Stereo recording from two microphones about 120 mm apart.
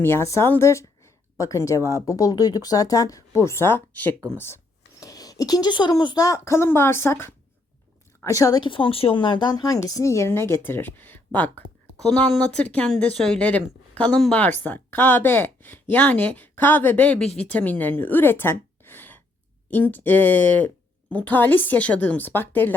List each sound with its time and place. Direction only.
0.0 s speech: 20° left (ahead or behind)
8.6 s speech: 45° left (ahead or behind); by 22.7 s 15° left (ahead or behind)